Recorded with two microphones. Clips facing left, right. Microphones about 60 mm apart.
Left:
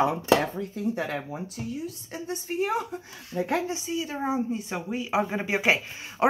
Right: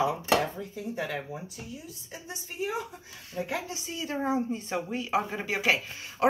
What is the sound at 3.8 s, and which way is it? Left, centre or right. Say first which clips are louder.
A woman's voice: left 2 dB; centre.